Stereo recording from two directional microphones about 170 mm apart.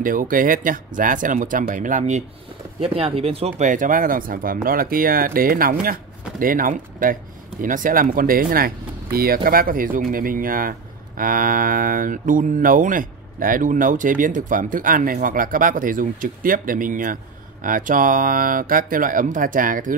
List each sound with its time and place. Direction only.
0.0 s speech: 55° right (ahead or behind)
2.8 s speech: 35° right (ahead or behind); by 20.0 s 50° right (ahead or behind)